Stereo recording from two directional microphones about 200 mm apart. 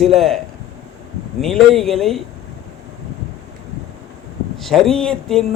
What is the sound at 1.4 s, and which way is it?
Speech, centre (ahead or behind).